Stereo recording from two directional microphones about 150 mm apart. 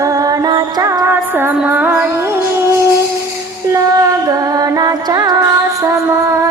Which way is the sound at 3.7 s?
25° right (ahead or behind).